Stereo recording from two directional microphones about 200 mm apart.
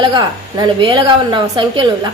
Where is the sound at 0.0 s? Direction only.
25° right (ahead or behind).